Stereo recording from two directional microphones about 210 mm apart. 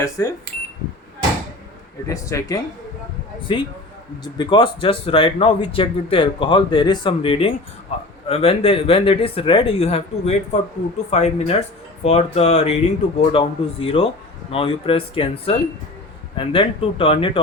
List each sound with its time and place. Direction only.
0.2 s speech: 15° left (ahead or behind)
2.0 s speech: 15° left (ahead or behind)